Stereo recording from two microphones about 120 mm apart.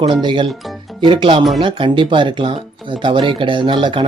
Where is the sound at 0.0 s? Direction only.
45° right (ahead or behind).